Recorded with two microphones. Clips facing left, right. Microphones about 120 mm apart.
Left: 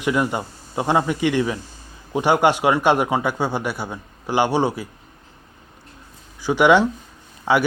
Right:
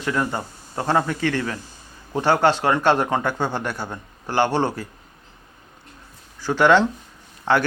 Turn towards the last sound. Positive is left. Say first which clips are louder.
# left 1 dB
turn(degrees=10)  # may be behind; listen again after turning